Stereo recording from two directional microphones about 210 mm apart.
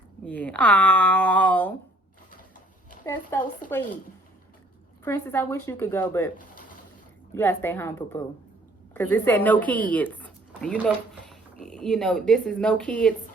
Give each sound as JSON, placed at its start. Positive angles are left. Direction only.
{"t": 0.3, "sound": "speech", "side_deg": 5}
{"t": 3.0, "sound": "speech", "side_deg": 10}
{"t": 3.6, "sound": "speech", "side_deg": 40}
{"t": 5.0, "sound": "speech", "side_deg": 10}
{"t": 7.3, "sound": "speech", "side_deg": 10}